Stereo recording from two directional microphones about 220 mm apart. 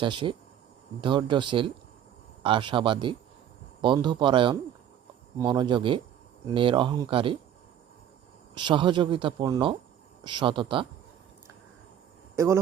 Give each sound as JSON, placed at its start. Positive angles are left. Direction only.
{"t": 0.0, "sound": "speech", "side_deg": -20}
{"t": 8.5, "sound": "speech", "side_deg": -20}
{"t": 12.4, "sound": "speech", "side_deg": -15}